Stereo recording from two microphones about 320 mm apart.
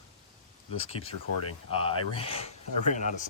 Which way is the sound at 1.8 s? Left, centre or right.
Centre.